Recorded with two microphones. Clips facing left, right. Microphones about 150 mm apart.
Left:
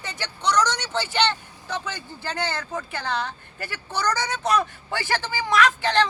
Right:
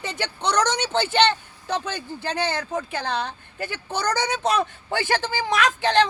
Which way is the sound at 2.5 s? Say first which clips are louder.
Right 3 dB; 15° right (ahead or behind).